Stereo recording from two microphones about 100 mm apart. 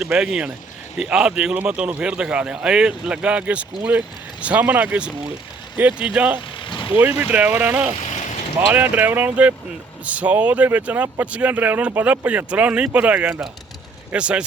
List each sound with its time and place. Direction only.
0.2 s a man's voice: 5° right (ahead or behind)
6.7 s vehicle: 55° left (ahead or behind)
6.9 s a man's voice: 15° right (ahead or behind)